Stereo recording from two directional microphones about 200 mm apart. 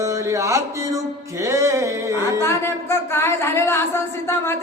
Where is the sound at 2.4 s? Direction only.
15° left (ahead or behind).